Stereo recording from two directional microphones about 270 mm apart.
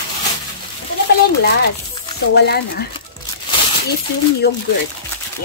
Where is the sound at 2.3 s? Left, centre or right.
Left.